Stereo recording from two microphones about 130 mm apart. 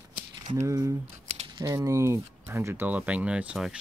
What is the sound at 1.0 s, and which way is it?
Squish, 55° right (ahead or behind).